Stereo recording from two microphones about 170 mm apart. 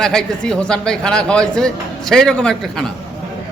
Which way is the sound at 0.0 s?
5° left (ahead or behind).